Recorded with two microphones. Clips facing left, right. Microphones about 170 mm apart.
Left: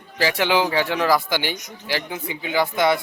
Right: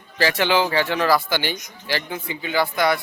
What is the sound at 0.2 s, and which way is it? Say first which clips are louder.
Speech: even; 15° left (ahead or behind).